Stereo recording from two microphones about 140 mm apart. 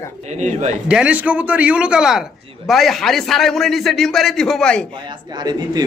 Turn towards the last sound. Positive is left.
turn(degrees=-30)  # may be behind; listen again after turning